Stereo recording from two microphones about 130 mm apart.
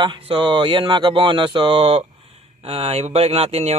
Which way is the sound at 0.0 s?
45° right (ahead or behind).